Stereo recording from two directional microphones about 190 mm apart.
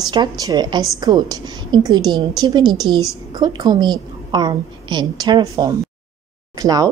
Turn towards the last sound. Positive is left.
turn(degrees=-20)  # may be behind; listen again after turning